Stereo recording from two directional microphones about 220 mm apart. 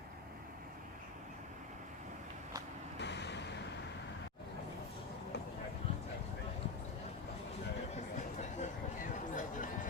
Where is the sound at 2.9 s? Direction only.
50° left (ahead or behind).